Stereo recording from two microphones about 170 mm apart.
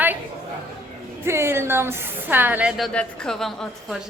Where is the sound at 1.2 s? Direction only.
15° right (ahead or behind).